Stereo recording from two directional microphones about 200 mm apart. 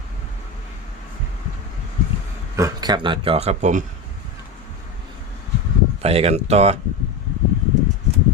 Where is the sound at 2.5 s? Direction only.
15° right (ahead or behind); by 3.8 s 35° right (ahead or behind).